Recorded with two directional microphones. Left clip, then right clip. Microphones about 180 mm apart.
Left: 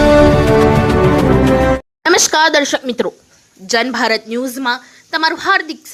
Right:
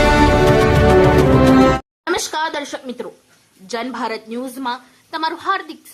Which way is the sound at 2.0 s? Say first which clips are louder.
Left 11 dB; 25° left (ahead or behind).